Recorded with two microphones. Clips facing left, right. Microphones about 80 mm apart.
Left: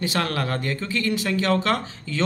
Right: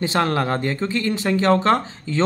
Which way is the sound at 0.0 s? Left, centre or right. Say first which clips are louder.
Right 5 dB; right.